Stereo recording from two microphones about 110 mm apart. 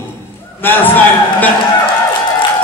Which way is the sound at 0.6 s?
20° left (ahead or behind).